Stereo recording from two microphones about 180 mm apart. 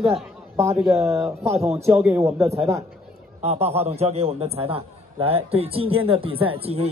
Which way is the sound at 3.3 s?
35° right (ahead or behind).